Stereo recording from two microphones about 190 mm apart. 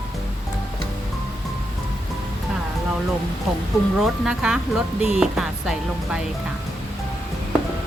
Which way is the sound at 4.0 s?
5° right (ahead or behind).